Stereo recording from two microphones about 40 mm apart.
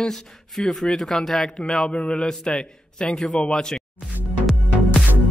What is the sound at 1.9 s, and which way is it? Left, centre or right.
A man's voice, left.